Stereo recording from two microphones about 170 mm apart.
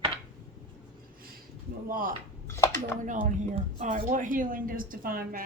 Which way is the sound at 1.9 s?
55° right (ahead or behind).